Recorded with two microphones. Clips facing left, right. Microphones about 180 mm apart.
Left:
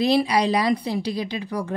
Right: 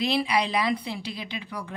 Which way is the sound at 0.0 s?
40° left (ahead or behind).